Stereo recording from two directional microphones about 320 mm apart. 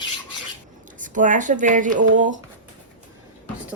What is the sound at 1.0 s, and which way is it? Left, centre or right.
Speech, right.